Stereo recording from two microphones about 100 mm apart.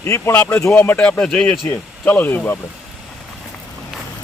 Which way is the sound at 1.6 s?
20° left (ahead or behind).